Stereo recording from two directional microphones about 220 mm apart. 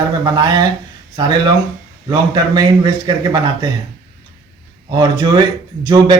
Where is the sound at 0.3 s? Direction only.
15° right (ahead or behind).